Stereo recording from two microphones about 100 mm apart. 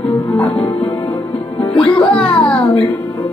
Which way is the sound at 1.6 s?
65° left (ahead or behind).